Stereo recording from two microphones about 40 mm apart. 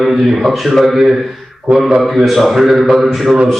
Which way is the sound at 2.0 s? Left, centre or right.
Centre.